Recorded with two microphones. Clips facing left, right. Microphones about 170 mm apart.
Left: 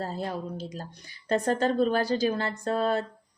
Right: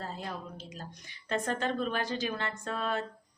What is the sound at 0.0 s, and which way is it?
Speech, 40° left (ahead or behind).